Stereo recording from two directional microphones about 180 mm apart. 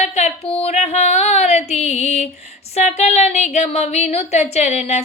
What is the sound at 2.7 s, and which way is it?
Speech, 40° left (ahead or behind).